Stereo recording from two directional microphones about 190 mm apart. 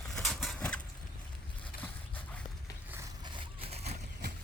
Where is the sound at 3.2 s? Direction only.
25° right (ahead or behind).